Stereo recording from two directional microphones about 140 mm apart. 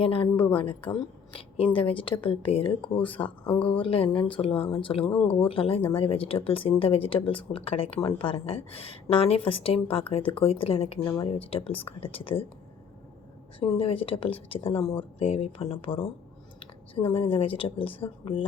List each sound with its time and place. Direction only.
0.0 s a woman's voice: 40° left (ahead or behind)
13.6 s a woman's voice: 40° left (ahead or behind)